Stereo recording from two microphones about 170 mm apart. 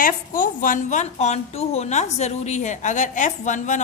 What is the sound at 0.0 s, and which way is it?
A woman's voice, 50° left (ahead or behind).